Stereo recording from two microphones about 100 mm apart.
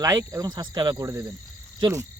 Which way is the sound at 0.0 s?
35° right (ahead or behind).